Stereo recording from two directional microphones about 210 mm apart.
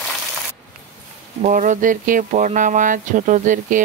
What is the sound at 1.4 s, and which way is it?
Speech, 35° right (ahead or behind).